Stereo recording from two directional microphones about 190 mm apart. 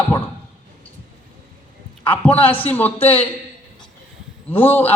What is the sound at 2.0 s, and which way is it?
A man's voice, 10° left (ahead or behind).